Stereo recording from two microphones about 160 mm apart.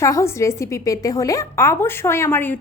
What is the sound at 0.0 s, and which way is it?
A woman's voice, 20° left (ahead or behind).